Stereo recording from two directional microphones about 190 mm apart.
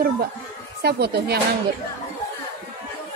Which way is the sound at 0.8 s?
60° right (ahead or behind).